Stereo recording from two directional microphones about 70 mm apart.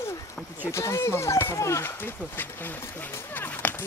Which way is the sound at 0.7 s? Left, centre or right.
Left.